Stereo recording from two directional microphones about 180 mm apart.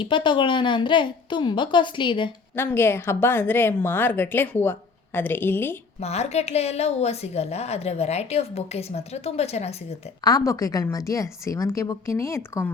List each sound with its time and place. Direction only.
0.0 s speech: 25° left (ahead or behind)
2.6 s speech: 15° left (ahead or behind)
6.0 s a woman's voice: 35° left (ahead or behind)
10.2 s speech: 20° left (ahead or behind)